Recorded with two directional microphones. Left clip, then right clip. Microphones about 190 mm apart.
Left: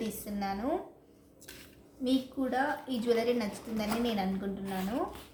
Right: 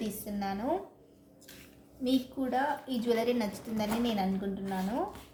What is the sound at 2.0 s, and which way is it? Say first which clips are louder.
A woman's voice: even; 15° right (ahead or behind).